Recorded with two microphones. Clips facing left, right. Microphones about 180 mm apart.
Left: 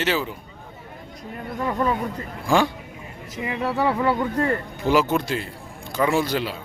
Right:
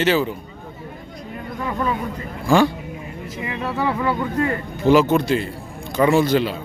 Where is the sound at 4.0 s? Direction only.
40° left (ahead or behind).